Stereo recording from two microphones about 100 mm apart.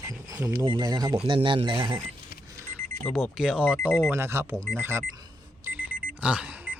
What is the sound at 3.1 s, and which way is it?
Speech, 5° right (ahead or behind).